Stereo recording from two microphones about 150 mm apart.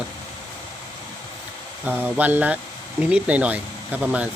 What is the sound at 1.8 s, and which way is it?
Speech, 10° right (ahead or behind).